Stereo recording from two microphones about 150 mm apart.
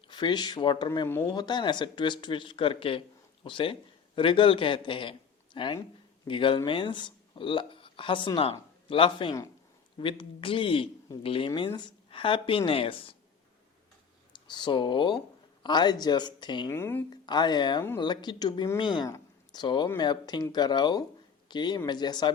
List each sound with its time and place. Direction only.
0.1 s speech: 30° left (ahead or behind)
1.0 s speech: 15° left (ahead or behind)
1.3 s a man's voice: 30° left (ahead or behind)
14.3 s a man's voice: 30° left (ahead or behind)
16.7 s speech: 15° left (ahead or behind)
17.1 s a man's voice: 30° left (ahead or behind)